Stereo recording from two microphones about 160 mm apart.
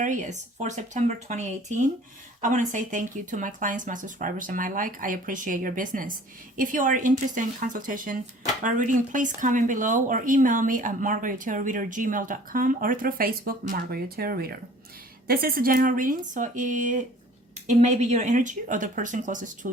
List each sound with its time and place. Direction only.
0.0 s speech: 50° right (ahead or behind)